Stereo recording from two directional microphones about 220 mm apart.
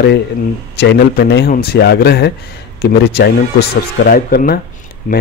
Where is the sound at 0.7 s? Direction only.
45° left (ahead or behind).